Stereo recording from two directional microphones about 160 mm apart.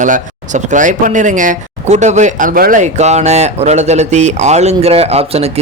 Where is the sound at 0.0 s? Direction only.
50° right (ahead or behind).